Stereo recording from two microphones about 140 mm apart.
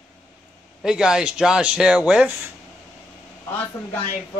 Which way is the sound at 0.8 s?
5° right (ahead or behind).